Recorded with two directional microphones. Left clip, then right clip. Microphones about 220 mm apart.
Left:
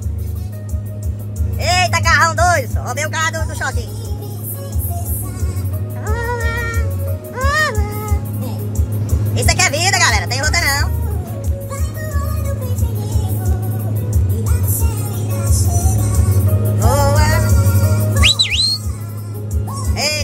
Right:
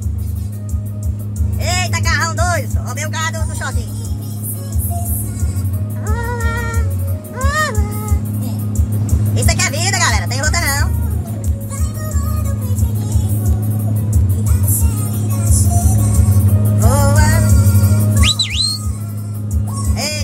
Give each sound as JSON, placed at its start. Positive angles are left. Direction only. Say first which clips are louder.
{"t": 1.6, "sound": "speech", "louder": "left 5 dB", "side_deg": -10}
{"t": 6.0, "sound": "music", "louder": "left 2 dB", "side_deg": -10}
{"t": 9.3, "sound": "music", "louder": "left 3 dB", "side_deg": -15}
{"t": 14.9, "sound": "music", "louder": "right 1 dB", "side_deg": 0}
{"t": 16.8, "sound": "music", "louder": "left 1 dB", "side_deg": -15}
{"t": 17.4, "sound": "music", "louder": "even", "side_deg": 0}
{"t": 18.2, "sound": "music", "louder": "left 3 dB", "side_deg": -15}
{"t": 19.9, "sound": "music", "louder": "left 3 dB", "side_deg": -15}